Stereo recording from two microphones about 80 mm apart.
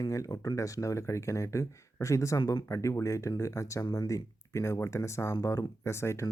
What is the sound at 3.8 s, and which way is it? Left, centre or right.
Speech, left.